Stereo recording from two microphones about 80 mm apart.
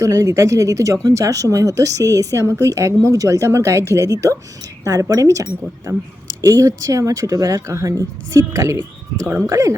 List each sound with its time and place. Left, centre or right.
0.0 s a woman's voice: right